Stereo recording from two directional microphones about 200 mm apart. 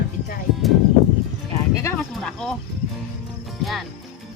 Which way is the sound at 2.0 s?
5° left (ahead or behind).